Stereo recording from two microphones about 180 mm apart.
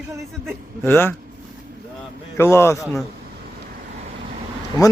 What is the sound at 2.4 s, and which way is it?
Speech, 15° left (ahead or behind).